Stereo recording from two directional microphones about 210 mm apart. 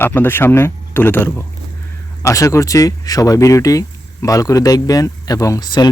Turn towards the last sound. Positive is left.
turn(degrees=20)  # may be behind; listen again after turning